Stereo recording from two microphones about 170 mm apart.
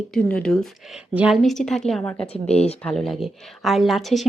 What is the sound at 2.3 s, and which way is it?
Speech, 35° left (ahead or behind).